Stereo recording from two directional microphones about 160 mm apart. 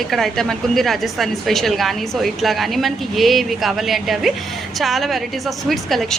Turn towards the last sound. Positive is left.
turn(degrees=0)  # may be behind; listen again after turning